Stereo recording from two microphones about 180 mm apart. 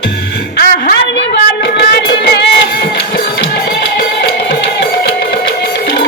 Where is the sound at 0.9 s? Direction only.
65° left (ahead or behind).